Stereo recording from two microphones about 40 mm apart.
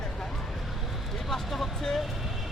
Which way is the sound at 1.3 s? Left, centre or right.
Centre.